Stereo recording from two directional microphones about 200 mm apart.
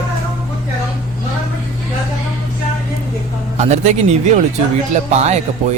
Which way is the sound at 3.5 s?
35° right (ahead or behind).